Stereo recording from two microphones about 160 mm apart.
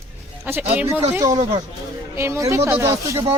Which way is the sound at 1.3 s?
40° right (ahead or behind).